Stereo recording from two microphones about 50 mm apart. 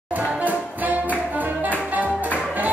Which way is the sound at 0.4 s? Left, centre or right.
Right.